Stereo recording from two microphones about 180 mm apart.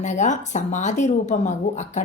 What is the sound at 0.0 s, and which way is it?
A woman's voice, 40° left (ahead or behind).